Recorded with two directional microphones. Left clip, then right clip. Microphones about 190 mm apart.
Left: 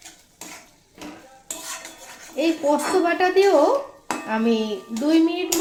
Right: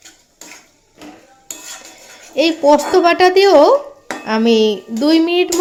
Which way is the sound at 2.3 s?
45° right (ahead or behind).